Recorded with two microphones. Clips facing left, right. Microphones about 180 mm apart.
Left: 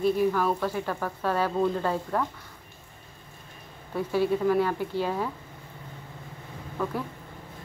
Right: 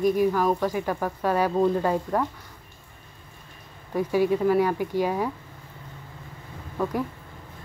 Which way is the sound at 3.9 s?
10° right (ahead or behind).